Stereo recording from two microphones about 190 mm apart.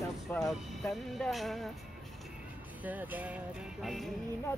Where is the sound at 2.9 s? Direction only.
10° right (ahead or behind).